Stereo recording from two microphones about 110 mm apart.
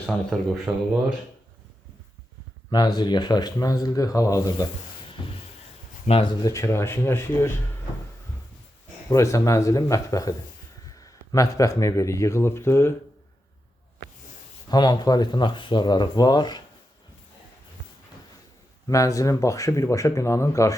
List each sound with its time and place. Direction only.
0.7 s speech: 5° right (ahead or behind)
2.6 s speech: 40° left (ahead or behind)
5.2 s a sound: 45° left (ahead or behind)
6.1 s speech: 90° left
6.4 s speech: 25° left (ahead or behind)
9.0 s speech: 30° left (ahead or behind)
14.7 s speech: 35° left (ahead or behind)
18.9 s speech: 30° left (ahead or behind)